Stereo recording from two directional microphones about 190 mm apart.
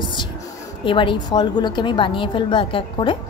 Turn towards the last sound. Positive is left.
turn(degrees=25)  # may be behind; listen again after turning